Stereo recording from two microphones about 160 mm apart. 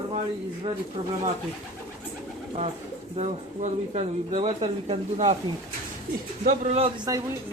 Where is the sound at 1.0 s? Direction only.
40° right (ahead or behind).